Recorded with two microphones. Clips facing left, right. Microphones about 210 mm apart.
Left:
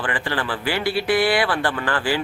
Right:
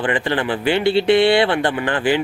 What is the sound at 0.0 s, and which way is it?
Speech, 20° right (ahead or behind).